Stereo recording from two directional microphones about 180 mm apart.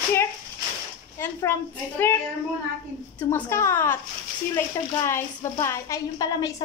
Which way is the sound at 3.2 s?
15° left (ahead or behind).